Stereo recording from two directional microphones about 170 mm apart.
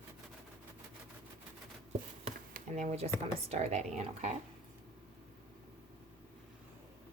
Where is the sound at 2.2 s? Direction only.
45° right (ahead or behind).